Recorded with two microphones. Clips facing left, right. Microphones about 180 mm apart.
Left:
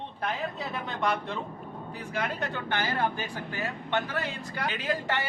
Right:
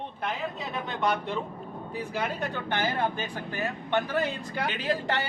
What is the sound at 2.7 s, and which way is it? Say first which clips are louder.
Speech: right 1 dB; 20° right (ahead or behind).